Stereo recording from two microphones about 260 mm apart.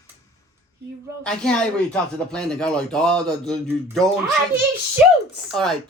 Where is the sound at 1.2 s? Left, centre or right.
Centre.